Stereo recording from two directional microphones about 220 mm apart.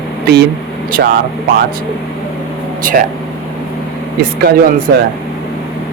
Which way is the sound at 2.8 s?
40° right (ahead or behind).